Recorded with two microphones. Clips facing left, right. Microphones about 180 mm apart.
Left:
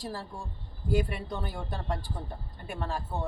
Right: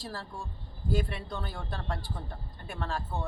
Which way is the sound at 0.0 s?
15° left (ahead or behind).